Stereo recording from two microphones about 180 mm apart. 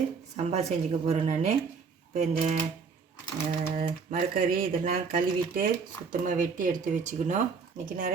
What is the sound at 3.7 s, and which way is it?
Speech, 50° right (ahead or behind).